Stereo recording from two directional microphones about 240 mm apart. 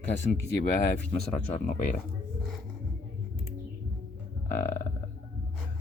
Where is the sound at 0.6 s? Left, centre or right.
Left.